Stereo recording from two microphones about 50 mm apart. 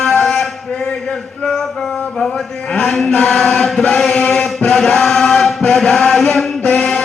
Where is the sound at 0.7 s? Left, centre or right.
Left.